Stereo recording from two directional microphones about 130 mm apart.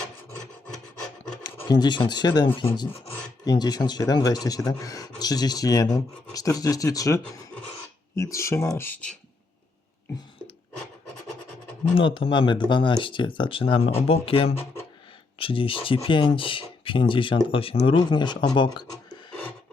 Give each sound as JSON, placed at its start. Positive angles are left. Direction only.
{"t": 1.5, "sound": "speech", "side_deg": 35}
{"t": 11.9, "sound": "speech", "side_deg": 45}